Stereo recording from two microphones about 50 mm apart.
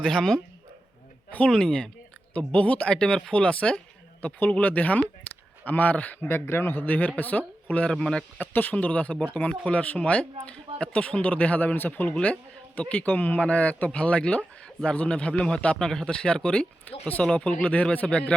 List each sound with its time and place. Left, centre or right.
0.0 s speech: centre
1.5 s speech: centre
2.5 s speech: left
3.3 s speech: left
6.2 s a man's voice: left; by 8.4 s centre
8.5 s speech: left
12.1 s speech: left
16.9 s speech: left